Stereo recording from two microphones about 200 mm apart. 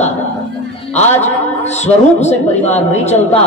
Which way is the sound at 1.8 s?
35° left (ahead or behind).